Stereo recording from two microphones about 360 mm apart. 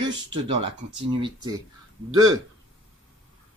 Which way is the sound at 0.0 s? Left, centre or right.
Right.